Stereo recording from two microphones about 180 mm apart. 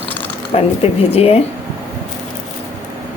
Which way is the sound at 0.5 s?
35° left (ahead or behind).